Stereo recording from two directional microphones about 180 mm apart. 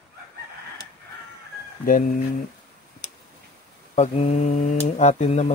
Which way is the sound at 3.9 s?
35° left (ahead or behind).